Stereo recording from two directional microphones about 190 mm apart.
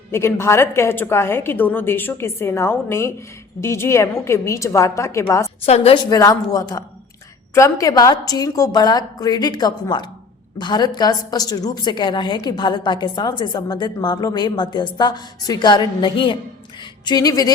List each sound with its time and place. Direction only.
0.1 s a woman's voice: 15° left (ahead or behind)
5.6 s a woman's voice: 35° left (ahead or behind)
6.1 s a woman's voice: 20° left (ahead or behind)